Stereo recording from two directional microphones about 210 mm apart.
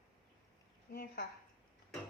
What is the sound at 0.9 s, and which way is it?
Speech, 45° left (ahead or behind).